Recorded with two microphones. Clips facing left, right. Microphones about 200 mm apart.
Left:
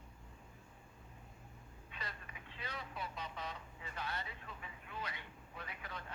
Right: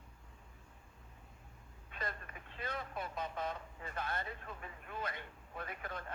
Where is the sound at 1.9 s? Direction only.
50° right (ahead or behind).